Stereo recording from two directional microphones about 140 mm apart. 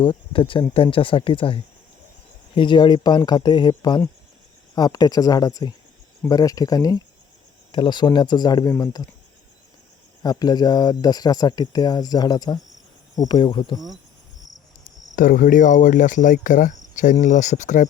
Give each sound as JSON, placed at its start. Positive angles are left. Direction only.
{"t": 0.0, "sound": "speech", "side_deg": 35}
{"t": 10.2, "sound": "speech", "side_deg": 30}
{"t": 15.1, "sound": "speech", "side_deg": 75}